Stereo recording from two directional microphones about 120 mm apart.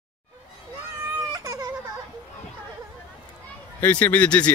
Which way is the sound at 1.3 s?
30° right (ahead or behind).